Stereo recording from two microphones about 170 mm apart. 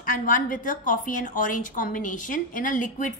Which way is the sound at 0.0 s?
55° left (ahead or behind).